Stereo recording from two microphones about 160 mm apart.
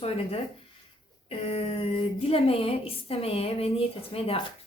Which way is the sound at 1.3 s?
35° left (ahead or behind).